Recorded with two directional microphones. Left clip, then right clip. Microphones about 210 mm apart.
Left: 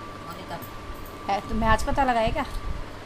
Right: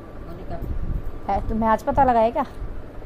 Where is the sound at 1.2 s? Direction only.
15° right (ahead or behind).